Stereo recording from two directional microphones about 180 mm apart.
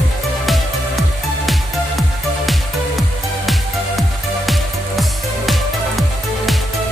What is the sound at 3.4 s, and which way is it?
Music, centre (ahead or behind).